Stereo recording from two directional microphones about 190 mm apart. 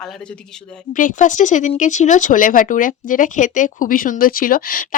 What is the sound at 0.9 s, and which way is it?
Speech, 45° left (ahead or behind).